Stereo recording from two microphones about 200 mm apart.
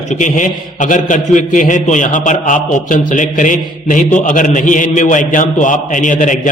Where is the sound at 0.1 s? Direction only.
40° left (ahead or behind).